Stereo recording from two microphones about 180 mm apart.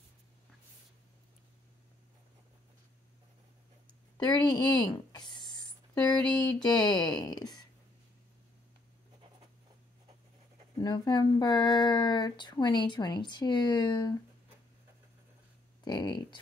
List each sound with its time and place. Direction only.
4.2 s a sound: 20° left (ahead or behind)
6.6 s speech: 20° left (ahead or behind)
10.8 s speech: 25° left (ahead or behind)
15.8 s speech: 25° left (ahead or behind)